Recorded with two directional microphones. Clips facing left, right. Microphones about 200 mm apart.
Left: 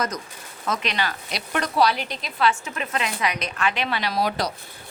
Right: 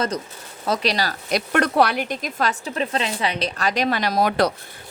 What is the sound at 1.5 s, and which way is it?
A woman's voice, 60° right (ahead or behind).